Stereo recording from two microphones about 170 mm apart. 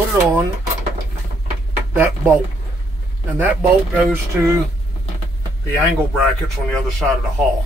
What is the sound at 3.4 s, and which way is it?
Speech, 10° right (ahead or behind).